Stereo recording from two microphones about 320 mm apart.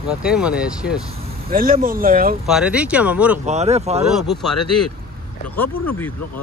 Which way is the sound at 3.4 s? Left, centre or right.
Right.